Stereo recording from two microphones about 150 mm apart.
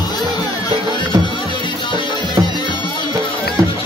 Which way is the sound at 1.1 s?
30° right (ahead or behind).